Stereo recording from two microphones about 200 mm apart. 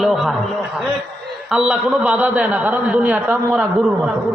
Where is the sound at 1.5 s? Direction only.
5° right (ahead or behind).